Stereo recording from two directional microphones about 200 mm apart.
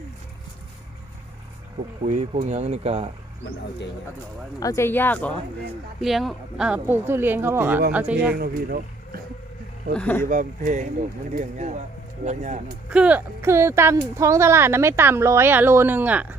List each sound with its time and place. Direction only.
2.0 s speech: 35° right (ahead or behind)
4.6 s speech: 15° left (ahead or behind); by 8.4 s 5° right (ahead or behind)
8.4 s speech: 45° right (ahead or behind)
9.9 s speech: 5° left (ahead or behind)
10.2 s speech: 40° right (ahead or behind)
12.9 s speech: 5° right (ahead or behind)